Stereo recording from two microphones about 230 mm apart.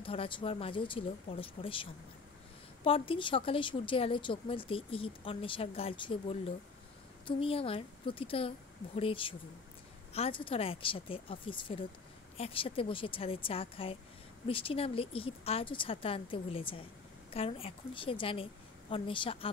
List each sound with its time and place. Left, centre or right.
0.0 s a woman's voice: left